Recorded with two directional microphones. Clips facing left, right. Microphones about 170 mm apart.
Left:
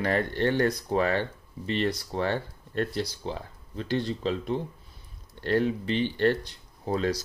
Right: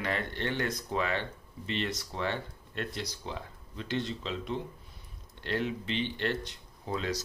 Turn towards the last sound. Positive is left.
turn(degrees=40)  # may be behind; listen again after turning